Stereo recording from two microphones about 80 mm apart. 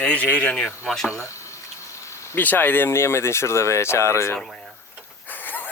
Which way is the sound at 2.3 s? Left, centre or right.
Left.